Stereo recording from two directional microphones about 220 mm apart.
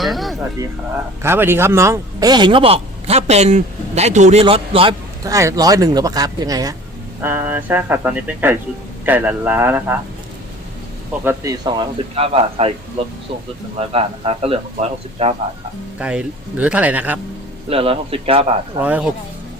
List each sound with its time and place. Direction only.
0.0 s music: centre (ahead or behind)
1.2 s a man's voice: 10° right (ahead or behind)
11.2 s speech: 10° right (ahead or behind)
13.7 s speech: 25° right (ahead or behind)
16.0 s a man's voice: 5° right (ahead or behind)
17.7 s speech: 25° right (ahead or behind)
18.8 s a man's voice: 5° right (ahead or behind)